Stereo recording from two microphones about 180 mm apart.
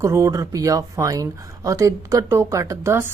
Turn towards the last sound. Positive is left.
turn(degrees=-15)  # may be behind; listen again after turning